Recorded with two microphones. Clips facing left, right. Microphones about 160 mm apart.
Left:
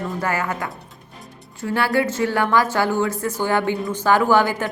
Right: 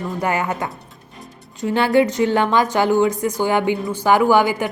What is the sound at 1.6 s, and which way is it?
A woman's voice, 20° right (ahead or behind).